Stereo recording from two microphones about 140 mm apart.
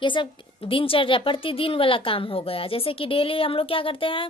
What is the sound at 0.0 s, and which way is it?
A woman's voice, 35° left (ahead or behind).